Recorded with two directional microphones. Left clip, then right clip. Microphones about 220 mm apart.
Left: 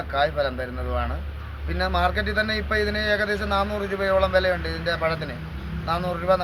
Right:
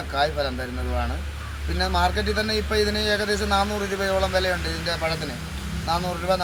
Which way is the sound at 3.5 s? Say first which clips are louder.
Right 1 dB; 5° left (ahead or behind).